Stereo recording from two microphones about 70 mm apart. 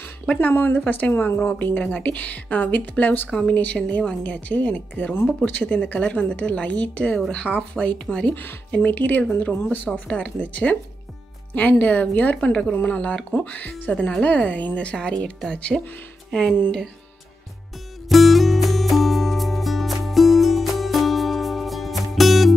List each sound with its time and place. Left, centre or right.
0.3 s a woman's voice: left
3.3 s a woman's voice: centre
18.0 s music: centre